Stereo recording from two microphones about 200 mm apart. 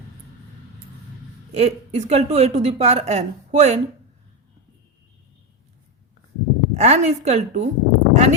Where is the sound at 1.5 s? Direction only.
30° right (ahead or behind).